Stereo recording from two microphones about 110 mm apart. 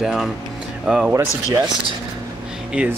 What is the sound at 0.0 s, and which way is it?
Speech, 5° right (ahead or behind).